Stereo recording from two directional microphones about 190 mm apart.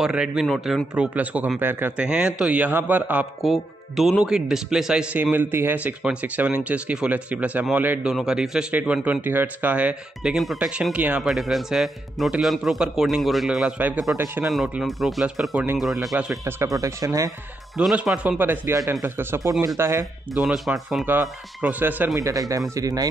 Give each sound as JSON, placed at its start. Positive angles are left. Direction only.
{"t": 0.0, "sound": "a man's voice", "side_deg": -5}
{"t": 17.7, "sound": "speech", "side_deg": 0}
{"t": 20.3, "sound": "speech", "side_deg": 0}